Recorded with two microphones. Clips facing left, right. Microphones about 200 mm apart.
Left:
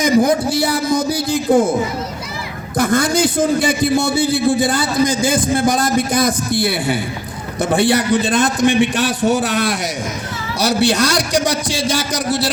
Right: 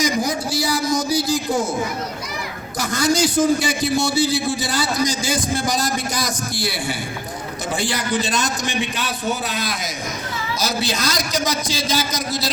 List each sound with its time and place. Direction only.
0.0 s speech: 55° left (ahead or behind)
2.7 s a man's voice: 55° left (ahead or behind)